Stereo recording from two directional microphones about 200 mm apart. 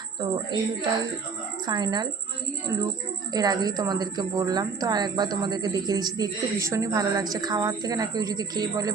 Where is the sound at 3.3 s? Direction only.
20° right (ahead or behind).